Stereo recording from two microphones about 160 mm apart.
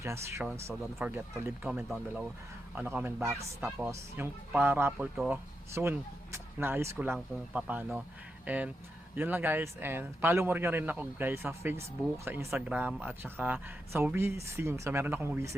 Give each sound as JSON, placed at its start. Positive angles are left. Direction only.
{"t": 0.0, "sound": "a man's voice", "side_deg": -15}